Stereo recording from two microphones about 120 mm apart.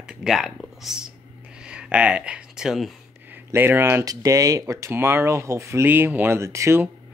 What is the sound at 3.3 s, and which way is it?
Speech, 15° right (ahead or behind).